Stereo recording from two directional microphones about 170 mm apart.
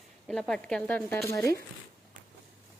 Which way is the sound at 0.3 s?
5° left (ahead or behind).